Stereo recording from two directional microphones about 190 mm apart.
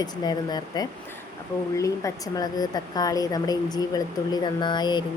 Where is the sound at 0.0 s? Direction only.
20° left (ahead or behind).